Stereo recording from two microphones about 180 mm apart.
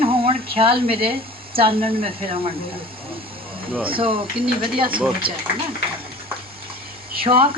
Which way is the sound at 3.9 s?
30° right (ahead or behind).